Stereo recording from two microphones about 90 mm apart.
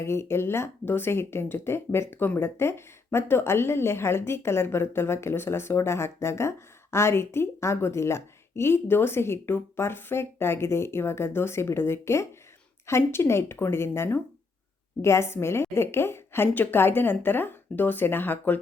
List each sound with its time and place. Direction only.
0.0 s speech: 30° left (ahead or behind)